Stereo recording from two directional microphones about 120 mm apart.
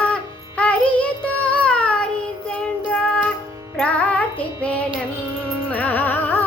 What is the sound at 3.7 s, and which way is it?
Music, 10° left (ahead or behind).